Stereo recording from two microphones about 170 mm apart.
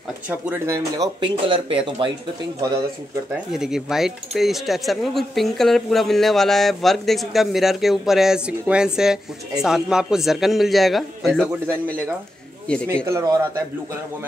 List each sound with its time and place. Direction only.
0.3 s speech: 15° right (ahead or behind); by 2.0 s 30° right (ahead or behind)
3.3 s speech: 5° right (ahead or behind)
12.8 s speech: 15° right (ahead or behind)